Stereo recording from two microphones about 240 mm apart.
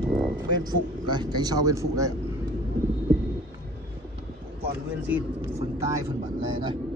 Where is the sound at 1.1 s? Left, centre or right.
Centre.